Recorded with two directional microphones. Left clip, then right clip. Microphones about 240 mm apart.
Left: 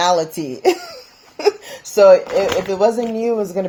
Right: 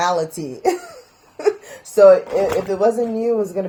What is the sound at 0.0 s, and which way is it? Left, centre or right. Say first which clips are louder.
Speech: left 3 dB; left.